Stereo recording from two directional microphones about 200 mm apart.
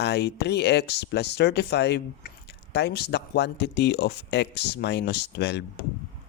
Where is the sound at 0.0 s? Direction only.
60° left (ahead or behind).